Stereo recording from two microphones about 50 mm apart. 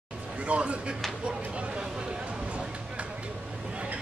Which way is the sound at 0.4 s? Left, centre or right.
Right.